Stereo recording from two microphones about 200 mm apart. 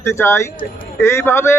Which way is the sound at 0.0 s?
15° left (ahead or behind).